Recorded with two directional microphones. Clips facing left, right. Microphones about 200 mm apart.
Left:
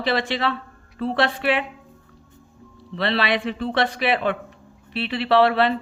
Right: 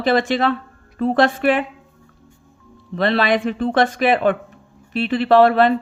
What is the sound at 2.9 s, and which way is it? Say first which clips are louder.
Speech: right 5 dB; 45° right (ahead or behind).